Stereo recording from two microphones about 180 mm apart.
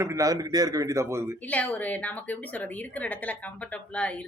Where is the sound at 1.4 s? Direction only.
10° left (ahead or behind).